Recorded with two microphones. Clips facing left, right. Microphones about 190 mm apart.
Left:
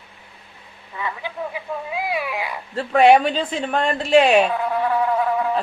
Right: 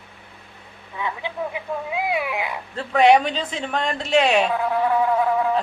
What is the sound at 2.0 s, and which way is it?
Cat, 20° right (ahead or behind).